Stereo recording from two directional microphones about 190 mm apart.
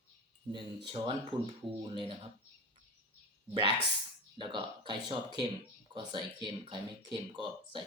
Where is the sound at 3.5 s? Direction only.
25° right (ahead or behind).